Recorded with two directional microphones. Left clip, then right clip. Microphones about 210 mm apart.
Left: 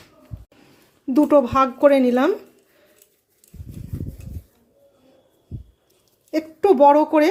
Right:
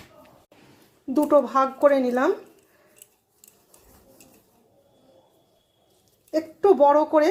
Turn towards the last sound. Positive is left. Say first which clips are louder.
# left 4 dB
turn(degrees=25)  # may be behind; listen again after turning